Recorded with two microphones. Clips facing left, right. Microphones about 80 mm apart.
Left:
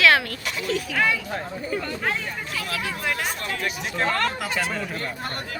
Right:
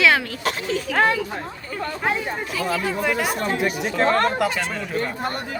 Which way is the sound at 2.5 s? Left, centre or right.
Centre.